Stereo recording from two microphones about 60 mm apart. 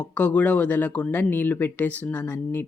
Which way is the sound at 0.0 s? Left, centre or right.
Left.